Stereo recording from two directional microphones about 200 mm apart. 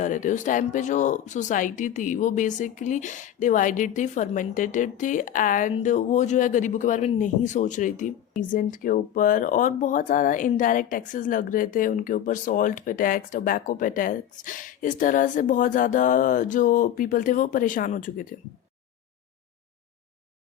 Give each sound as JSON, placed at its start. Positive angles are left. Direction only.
{"t": 0.0, "sound": "speech", "side_deg": 40}